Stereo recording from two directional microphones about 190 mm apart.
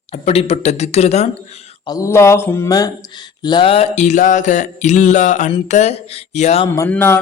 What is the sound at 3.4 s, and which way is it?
Music, 25° left (ahead or behind).